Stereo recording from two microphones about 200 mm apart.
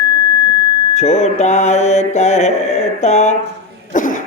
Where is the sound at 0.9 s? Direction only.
35° left (ahead or behind).